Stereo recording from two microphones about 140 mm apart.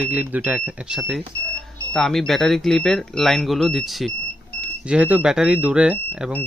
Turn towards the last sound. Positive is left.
turn(degrees=-10)  # may be behind; listen again after turning